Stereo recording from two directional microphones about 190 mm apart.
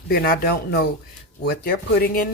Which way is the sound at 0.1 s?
50° left (ahead or behind).